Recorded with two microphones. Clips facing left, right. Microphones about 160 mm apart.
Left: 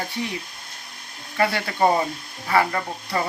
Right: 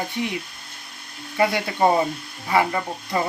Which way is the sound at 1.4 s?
15° right (ahead or behind).